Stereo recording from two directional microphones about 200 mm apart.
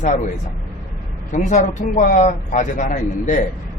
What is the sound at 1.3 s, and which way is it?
A man's voice, 35° left (ahead or behind).